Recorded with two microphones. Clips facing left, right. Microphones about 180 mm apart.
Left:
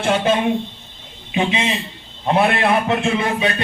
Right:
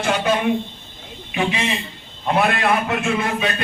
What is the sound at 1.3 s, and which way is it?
A man's voice, 20° left (ahead or behind).